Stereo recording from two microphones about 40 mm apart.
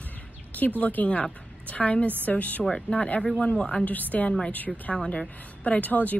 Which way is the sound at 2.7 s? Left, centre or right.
Centre.